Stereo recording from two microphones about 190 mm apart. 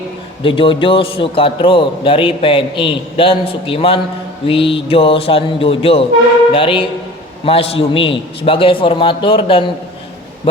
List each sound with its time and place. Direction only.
0.4 s a man's voice: 25° left (ahead or behind)